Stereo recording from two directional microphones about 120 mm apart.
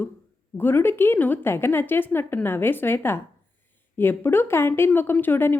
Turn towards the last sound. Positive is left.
turn(degrees=15)  # may be behind; listen again after turning